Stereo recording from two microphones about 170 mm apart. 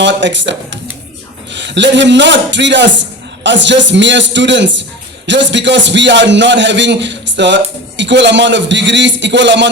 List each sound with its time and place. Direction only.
0.0 s a man's voice: 90° right